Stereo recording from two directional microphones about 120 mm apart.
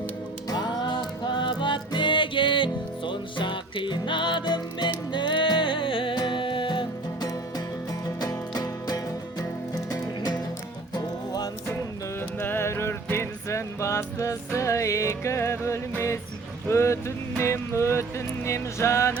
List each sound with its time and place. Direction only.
0.5 s music: 35° left (ahead or behind)
12.4 s music: 20° left (ahead or behind)